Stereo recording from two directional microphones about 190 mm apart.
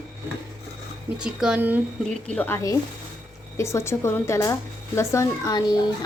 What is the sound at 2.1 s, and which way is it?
A woman's voice, 5° left (ahead or behind).